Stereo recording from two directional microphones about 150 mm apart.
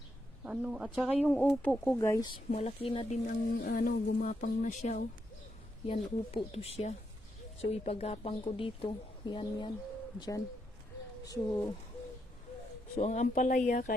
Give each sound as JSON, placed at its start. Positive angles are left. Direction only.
{"t": 0.4, "sound": "speech", "side_deg": -5}
{"t": 1.3, "sound": "speech", "side_deg": 10}
{"t": 2.0, "sound": "speech", "side_deg": 20}
{"t": 2.5, "sound": "speech", "side_deg": 45}
{"t": 3.2, "sound": "music", "side_deg": 90}
{"t": 5.9, "sound": "speech", "side_deg": 40}
{"t": 13.0, "sound": "speech", "side_deg": 50}